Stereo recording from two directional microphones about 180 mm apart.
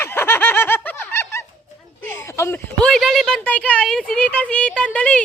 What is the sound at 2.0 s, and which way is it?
A woman's voice, 10° left (ahead or behind).